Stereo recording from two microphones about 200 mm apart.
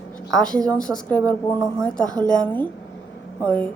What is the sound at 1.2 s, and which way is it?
Speech, 15° right (ahead or behind).